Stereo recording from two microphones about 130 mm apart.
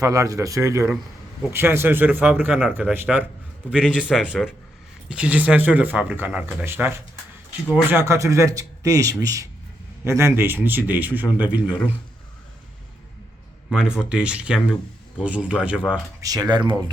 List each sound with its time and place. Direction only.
0.0 s a man's voice: 25° right (ahead or behind)
13.7 s speech: 5° right (ahead or behind)
16.2 s speech: 30° right (ahead or behind)